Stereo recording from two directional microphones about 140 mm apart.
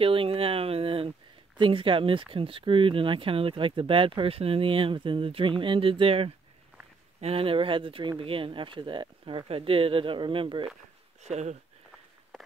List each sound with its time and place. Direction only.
0.0 s a sound: 40° right (ahead or behind)
1.6 s speech: 40° right (ahead or behind)
11.2 s speech: 55° right (ahead or behind)